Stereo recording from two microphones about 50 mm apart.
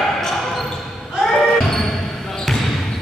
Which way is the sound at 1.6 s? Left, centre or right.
Centre.